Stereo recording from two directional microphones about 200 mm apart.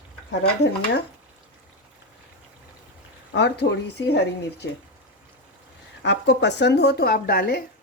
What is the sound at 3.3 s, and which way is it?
Speech, 55° left (ahead or behind).